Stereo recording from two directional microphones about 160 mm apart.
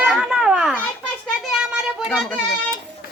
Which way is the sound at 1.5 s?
Centre (ahead or behind).